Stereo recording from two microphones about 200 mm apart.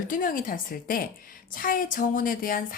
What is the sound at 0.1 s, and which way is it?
A woman's voice, 40° left (ahead or behind).